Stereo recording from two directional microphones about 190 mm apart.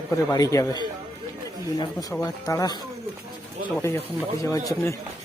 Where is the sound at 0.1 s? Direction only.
15° left (ahead or behind).